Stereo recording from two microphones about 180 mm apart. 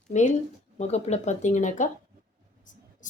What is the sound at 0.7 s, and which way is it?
Speech, 35° left (ahead or behind).